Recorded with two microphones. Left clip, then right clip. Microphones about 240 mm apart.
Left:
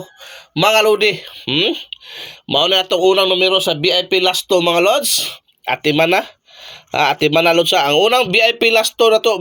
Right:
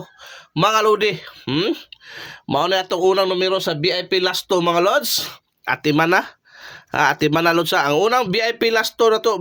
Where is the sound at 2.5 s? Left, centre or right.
Right.